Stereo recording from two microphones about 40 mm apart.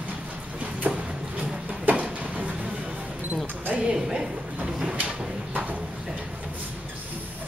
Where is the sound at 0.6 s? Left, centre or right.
Right.